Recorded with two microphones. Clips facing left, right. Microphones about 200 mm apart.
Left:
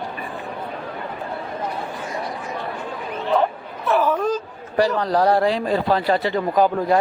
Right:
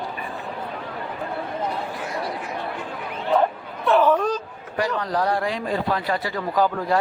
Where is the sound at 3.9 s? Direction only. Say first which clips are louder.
Right 1 dB; 5° left (ahead or behind).